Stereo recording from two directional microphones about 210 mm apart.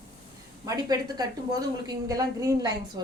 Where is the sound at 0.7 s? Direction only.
15° right (ahead or behind).